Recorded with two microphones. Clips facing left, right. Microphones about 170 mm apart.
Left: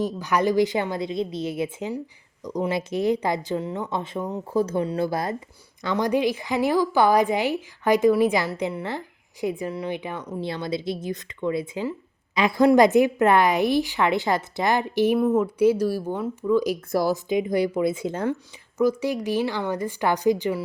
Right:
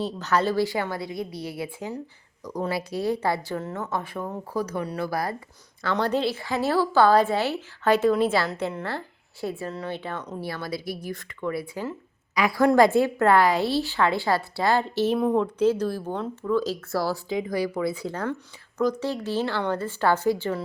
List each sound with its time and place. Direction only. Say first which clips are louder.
0.0 s a woman's voice: left 2 dB; 15° left (ahead or behind)
18.8 s a woman's voice: left 3 dB; 10° left (ahead or behind)